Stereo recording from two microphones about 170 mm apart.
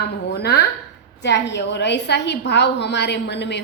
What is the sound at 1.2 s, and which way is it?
A woman's voice, 90° left.